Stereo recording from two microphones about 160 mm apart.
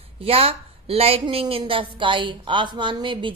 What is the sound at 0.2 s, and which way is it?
A woman's voice, 40° right (ahead or behind).